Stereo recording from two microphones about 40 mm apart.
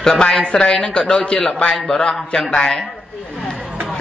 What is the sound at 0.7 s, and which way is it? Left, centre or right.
A man's voice, left.